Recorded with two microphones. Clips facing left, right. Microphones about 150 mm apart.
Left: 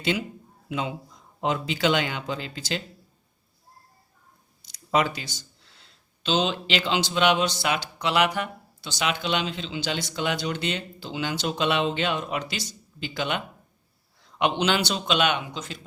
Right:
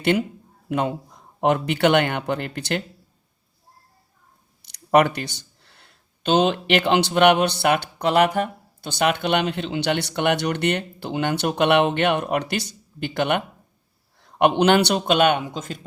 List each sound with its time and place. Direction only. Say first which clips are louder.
0.0 s speech: right 6 dB; 60° right (ahead or behind)
4.6 s a man's voice: right 7 dB; 65° right (ahead or behind); by 15.8 s 45° right (ahead or behind)